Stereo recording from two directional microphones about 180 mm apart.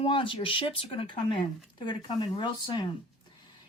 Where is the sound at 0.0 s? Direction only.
30° left (ahead or behind).